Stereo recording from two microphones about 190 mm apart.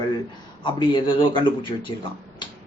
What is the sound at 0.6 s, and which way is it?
Speech, 25° left (ahead or behind).